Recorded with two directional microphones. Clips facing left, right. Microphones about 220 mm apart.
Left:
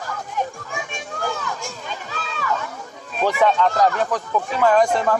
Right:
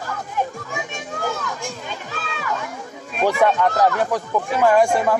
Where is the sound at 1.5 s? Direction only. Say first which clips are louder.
Right 2 dB; 15° right (ahead or behind).